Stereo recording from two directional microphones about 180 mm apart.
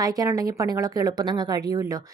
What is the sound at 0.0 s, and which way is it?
A woman's voice, 20° right (ahead or behind).